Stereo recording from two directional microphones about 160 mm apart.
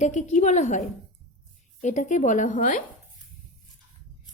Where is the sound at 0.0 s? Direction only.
50° left (ahead or behind).